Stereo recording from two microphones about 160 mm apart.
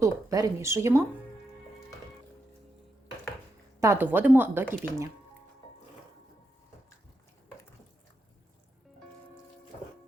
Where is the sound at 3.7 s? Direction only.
15° right (ahead or behind).